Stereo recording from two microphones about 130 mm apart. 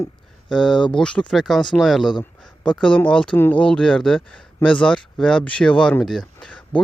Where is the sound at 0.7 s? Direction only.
35° left (ahead or behind).